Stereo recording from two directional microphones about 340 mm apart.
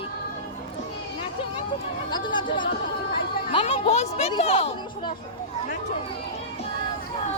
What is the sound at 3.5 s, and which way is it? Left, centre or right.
Music, centre.